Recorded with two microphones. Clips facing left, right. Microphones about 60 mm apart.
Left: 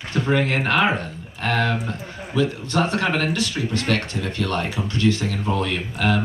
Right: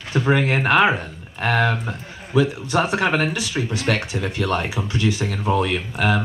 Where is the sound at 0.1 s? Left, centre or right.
Centre.